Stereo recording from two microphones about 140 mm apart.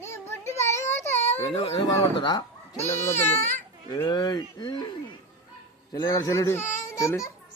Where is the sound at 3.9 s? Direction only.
25° left (ahead or behind).